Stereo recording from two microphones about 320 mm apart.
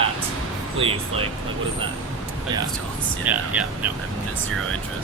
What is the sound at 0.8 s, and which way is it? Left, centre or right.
Speech, centre.